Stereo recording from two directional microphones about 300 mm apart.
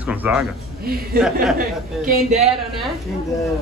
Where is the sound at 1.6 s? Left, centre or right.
Right.